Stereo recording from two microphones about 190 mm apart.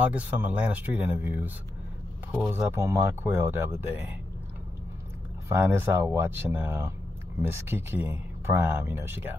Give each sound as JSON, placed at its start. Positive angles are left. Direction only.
{"t": 0.0, "sound": "speech", "side_deg": -10}
{"t": 2.5, "sound": "speech", "side_deg": -15}
{"t": 5.5, "sound": "speech", "side_deg": -10}